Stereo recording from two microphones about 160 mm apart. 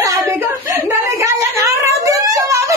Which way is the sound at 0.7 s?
15° right (ahead or behind).